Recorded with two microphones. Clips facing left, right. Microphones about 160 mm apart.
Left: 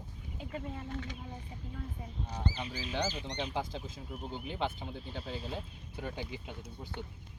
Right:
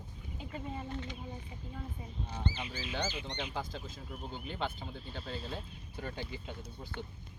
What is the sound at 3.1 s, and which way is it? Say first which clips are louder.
Speech: left 1 dB; 40° left (ahead or behind).